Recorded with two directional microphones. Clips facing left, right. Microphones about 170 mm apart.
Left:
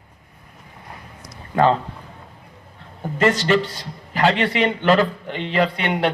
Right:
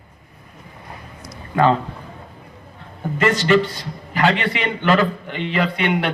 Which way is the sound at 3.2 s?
30° left (ahead or behind).